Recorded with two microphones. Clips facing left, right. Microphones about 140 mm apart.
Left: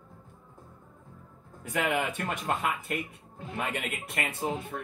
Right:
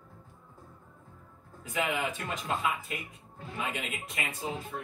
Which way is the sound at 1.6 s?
60° left (ahead or behind).